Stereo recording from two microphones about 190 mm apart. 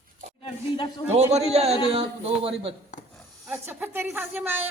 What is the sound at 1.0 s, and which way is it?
Speech, 35° right (ahead or behind).